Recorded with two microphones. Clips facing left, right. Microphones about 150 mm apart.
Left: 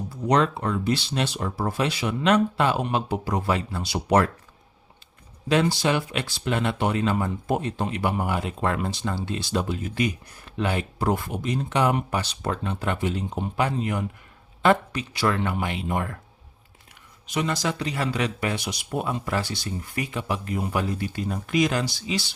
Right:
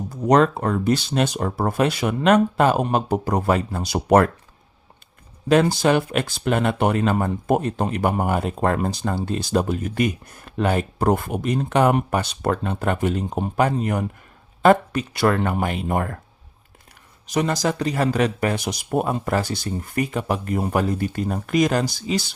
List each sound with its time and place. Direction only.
0.1 s speech: 45° right (ahead or behind)
5.5 s speech: 50° right (ahead or behind)
17.2 s speech: 40° right (ahead or behind)